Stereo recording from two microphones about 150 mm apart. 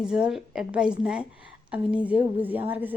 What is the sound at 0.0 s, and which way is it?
A woman's voice, 5° right (ahead or behind).